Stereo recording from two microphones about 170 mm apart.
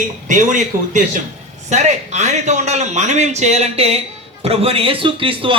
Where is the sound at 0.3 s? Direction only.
50° right (ahead or behind).